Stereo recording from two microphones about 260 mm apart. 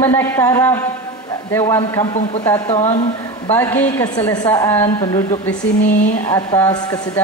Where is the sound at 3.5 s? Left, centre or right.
Centre.